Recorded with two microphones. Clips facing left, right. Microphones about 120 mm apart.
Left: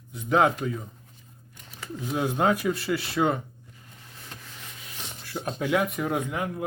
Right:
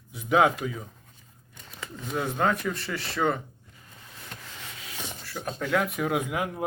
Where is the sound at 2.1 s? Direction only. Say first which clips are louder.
Left 2 dB; 10° left (ahead or behind).